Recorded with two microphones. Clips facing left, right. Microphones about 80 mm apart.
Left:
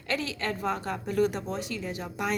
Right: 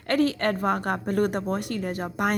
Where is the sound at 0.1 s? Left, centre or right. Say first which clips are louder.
Right 8 dB; right.